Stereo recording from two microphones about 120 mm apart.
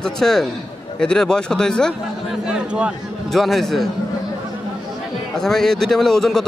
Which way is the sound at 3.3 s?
Centre (ahead or behind).